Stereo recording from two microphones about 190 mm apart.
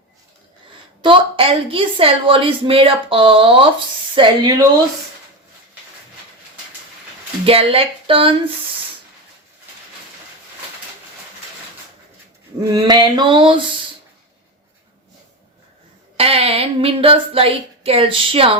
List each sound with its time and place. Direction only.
1.0 s a woman's voice: 25° right (ahead or behind)
7.4 s a woman's voice: 30° right (ahead or behind)
12.7 s a woman's voice: 20° right (ahead or behind)
16.1 s a woman's voice: 30° right (ahead or behind)